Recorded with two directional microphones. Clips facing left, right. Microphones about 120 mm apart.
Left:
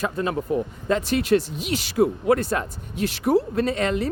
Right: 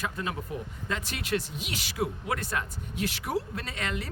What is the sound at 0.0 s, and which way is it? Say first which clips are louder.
Speech: left 9 dB; 40° left (ahead or behind).